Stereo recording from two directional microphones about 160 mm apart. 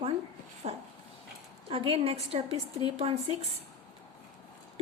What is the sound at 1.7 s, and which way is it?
A woman's voice, 35° right (ahead or behind).